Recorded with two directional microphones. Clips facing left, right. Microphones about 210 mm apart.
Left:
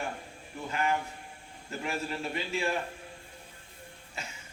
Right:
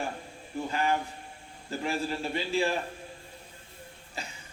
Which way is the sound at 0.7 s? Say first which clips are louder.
Right 1 dB; 35° right (ahead or behind).